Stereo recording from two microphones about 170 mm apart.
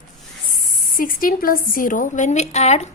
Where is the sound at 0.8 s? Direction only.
55° left (ahead or behind).